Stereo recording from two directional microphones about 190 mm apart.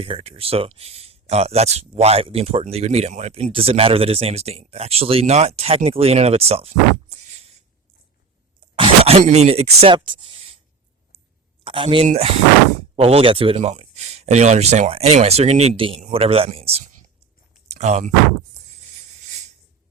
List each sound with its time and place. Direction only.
0.0 s speech: 30° right (ahead or behind)
8.7 s speech: 30° right (ahead or behind)
11.6 s speech: 25° right (ahead or behind)
17.7 s a sound: 35° right (ahead or behind)